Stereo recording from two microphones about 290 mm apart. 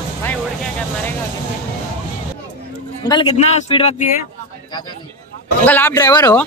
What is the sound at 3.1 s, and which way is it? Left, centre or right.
Speech, centre.